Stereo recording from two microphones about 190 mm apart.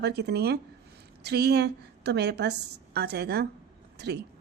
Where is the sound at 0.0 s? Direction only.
60° right (ahead or behind).